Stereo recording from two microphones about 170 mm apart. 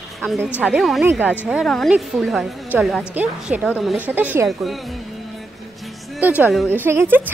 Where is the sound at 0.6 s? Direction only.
Centre (ahead or behind).